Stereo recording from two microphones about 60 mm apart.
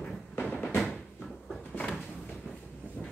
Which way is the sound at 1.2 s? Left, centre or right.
Centre.